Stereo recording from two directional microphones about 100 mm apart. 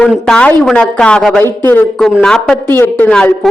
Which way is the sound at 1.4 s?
25° left (ahead or behind).